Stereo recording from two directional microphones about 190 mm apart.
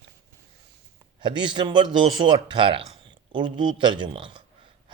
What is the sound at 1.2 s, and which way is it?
A man's voice, 25° right (ahead or behind).